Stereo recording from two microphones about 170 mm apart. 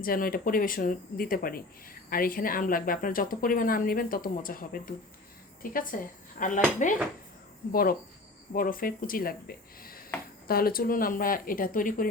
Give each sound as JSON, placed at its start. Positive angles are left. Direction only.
{"t": 0.0, "sound": "speech", "side_deg": 60}
{"t": 10.4, "sound": "speech", "side_deg": 60}